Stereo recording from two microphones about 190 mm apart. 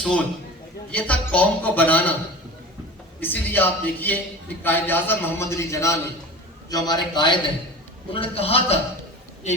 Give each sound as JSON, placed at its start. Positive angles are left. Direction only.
{"t": 0.9, "sound": "a man's voice", "side_deg": 5}
{"t": 3.2, "sound": "a man's voice", "side_deg": 10}